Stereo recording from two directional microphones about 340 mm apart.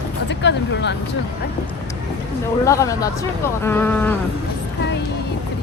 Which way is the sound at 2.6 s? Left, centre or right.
Centre.